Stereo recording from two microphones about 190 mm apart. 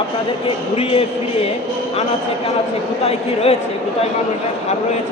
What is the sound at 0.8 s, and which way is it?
Speech, 30° left (ahead or behind).